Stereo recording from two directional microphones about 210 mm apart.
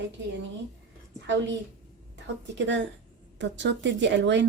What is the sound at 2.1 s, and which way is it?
A woman's voice, 60° right (ahead or behind).